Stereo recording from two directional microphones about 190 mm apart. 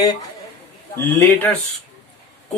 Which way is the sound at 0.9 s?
10° left (ahead or behind).